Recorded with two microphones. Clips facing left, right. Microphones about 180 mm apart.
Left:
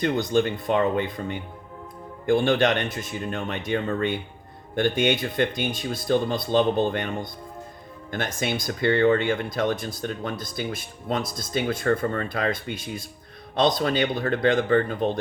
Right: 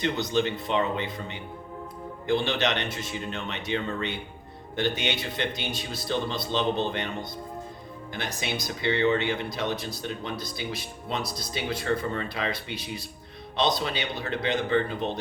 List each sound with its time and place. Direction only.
0.0 s speech: 50° left (ahead or behind)